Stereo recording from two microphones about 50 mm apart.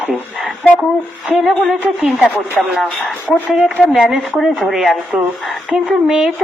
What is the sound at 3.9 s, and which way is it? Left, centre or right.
A woman's voice, centre.